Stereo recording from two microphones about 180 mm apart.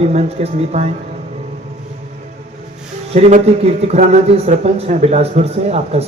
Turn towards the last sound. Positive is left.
turn(degrees=-35)  # may be behind; listen again after turning